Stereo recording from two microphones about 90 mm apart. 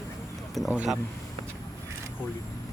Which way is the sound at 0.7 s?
5° right (ahead or behind).